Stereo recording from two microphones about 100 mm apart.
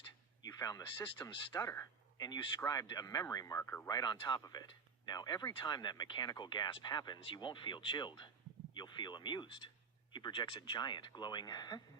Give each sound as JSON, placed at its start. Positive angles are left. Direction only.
{"t": 0.4, "sound": "a sound", "side_deg": 35}
{"t": 1.2, "sound": "speech", "side_deg": 35}
{"t": 3.6, "sound": "speech", "side_deg": 20}
{"t": 3.8, "sound": "speech", "side_deg": 40}